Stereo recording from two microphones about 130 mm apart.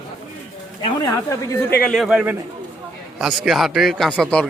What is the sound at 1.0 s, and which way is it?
Speech, 25° left (ahead or behind).